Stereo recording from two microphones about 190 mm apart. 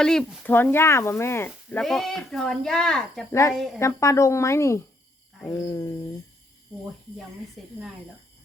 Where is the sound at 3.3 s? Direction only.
15° left (ahead or behind).